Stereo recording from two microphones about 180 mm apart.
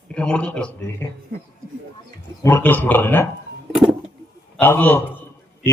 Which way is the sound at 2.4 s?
15° left (ahead or behind).